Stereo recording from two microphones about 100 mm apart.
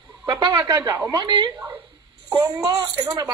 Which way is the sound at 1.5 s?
20° right (ahead or behind).